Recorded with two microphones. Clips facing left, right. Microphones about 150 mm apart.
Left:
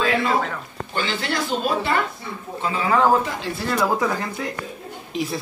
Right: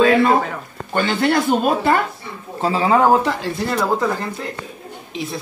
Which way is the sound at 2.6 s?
35° right (ahead or behind).